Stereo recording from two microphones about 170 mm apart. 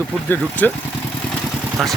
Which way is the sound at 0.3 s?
10° left (ahead or behind).